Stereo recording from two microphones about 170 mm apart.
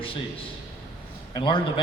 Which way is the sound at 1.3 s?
30° left (ahead or behind).